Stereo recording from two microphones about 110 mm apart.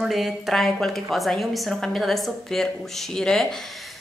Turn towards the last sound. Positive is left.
turn(degrees=5)  # may be behind; listen again after turning